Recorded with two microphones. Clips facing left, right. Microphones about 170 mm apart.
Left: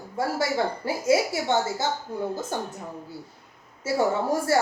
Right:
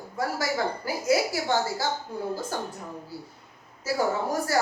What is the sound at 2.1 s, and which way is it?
Speech, centre (ahead or behind).